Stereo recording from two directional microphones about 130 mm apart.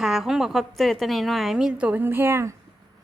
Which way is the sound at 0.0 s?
5° right (ahead or behind).